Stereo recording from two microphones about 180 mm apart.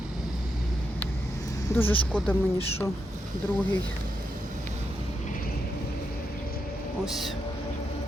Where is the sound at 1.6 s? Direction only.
10° left (ahead or behind).